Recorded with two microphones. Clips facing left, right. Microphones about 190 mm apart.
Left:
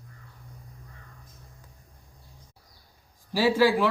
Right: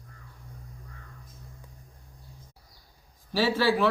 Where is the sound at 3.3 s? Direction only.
10° left (ahead or behind).